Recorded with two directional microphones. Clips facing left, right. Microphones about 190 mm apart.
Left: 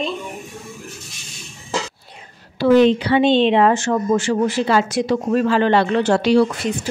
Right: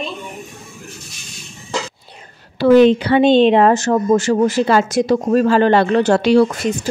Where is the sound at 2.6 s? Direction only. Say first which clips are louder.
Right 3 dB; 55° right (ahead or behind).